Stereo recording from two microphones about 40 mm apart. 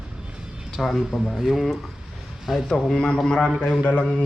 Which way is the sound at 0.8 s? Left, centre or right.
Centre.